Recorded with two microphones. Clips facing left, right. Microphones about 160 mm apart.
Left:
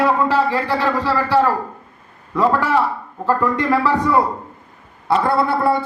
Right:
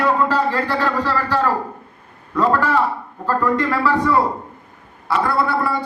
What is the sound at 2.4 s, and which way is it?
A man's voice, 10° left (ahead or behind).